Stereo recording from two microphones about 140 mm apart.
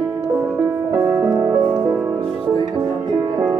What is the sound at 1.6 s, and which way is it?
Music, 30° right (ahead or behind).